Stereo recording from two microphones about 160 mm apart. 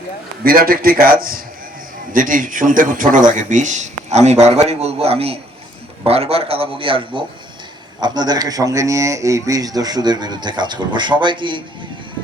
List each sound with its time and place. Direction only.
0.4 s a man's voice: 65° right (ahead or behind); by 11.6 s 30° right (ahead or behind)